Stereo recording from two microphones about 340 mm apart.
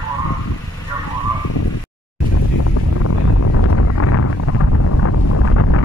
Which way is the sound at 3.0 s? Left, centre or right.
Left.